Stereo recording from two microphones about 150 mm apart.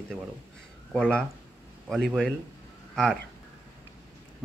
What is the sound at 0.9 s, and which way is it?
Speech, 5° left (ahead or behind).